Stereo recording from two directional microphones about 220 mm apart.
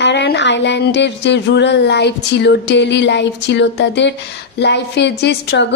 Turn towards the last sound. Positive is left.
turn(degrees=50)  # may be behind; listen again after turning